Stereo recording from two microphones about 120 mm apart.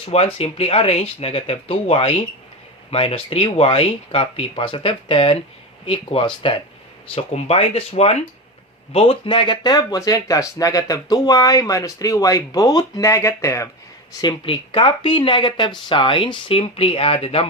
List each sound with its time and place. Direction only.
0.0 s speech: 55° left (ahead or behind)
7.2 s speech: 60° left (ahead or behind)
8.9 s speech: 50° left (ahead or behind); by 13.7 s 25° left (ahead or behind)
14.2 s speech: 45° left (ahead or behind)